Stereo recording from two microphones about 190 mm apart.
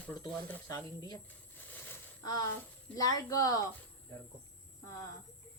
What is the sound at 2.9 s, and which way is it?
Speech, 15° left (ahead or behind).